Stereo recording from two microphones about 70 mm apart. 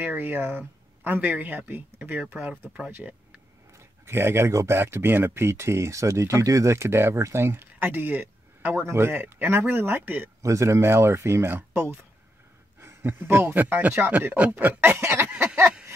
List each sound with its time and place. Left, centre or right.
0.0 s speech: right
3.7 s a sound: right
4.6 s speech: right
10.4 s speech: right